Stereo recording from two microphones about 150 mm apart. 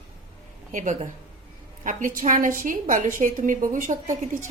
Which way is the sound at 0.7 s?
55° right (ahead or behind).